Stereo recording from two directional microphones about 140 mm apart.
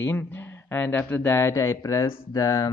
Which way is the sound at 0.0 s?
15° left (ahead or behind).